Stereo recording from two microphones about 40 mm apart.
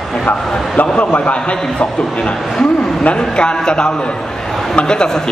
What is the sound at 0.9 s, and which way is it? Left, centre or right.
Speech, left.